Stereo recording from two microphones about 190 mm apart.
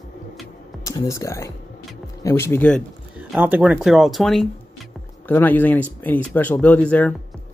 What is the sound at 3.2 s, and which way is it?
Speech, 10° right (ahead or behind).